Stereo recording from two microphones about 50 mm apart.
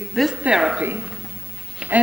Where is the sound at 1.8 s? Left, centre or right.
Right.